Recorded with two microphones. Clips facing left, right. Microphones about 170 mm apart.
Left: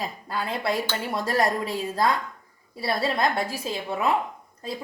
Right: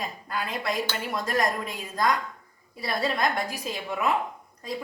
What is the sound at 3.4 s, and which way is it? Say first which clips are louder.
Speech: left 3 dB; 30° left (ahead or behind).